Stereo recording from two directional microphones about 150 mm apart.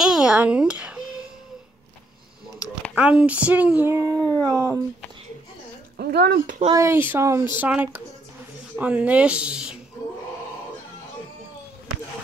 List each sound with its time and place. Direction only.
0.0 s a sound: 5° right (ahead or behind)
3.0 s a child's voice: 5° right (ahead or behind)
4.2 s howl: 10° left (ahead or behind)
4.5 s speech: 25° right (ahead or behind)
5.9 s speech: 90° right
6.7 s a child's voice: 20° right (ahead or behind)